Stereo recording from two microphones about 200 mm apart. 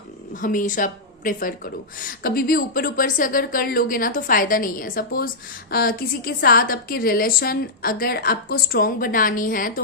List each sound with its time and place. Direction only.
0.3 s a woman's voice: 40° left (ahead or behind)